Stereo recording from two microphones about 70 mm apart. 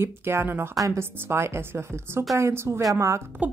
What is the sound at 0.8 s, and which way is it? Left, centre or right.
A woman's voice, right.